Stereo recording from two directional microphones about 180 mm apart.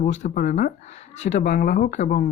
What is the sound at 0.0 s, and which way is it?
Speech, 45° left (ahead or behind).